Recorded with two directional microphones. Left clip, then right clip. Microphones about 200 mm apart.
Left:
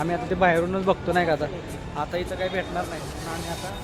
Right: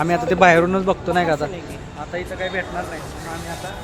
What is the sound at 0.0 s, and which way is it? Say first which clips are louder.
Speech: right 7 dB; 15° right (ahead or behind).